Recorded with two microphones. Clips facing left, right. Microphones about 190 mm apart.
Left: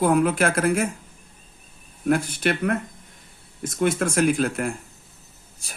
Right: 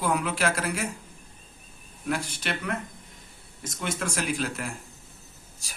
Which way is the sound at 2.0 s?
55° left (ahead or behind).